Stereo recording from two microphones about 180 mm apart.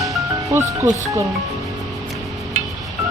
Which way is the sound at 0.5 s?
15° right (ahead or behind).